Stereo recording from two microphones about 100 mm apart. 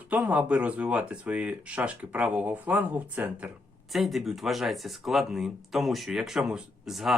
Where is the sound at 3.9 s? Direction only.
Centre (ahead or behind).